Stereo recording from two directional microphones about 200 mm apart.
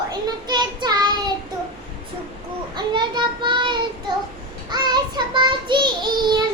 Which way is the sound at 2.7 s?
20° right (ahead or behind).